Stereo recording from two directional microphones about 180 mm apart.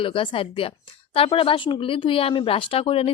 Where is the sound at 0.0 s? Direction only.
30° left (ahead or behind).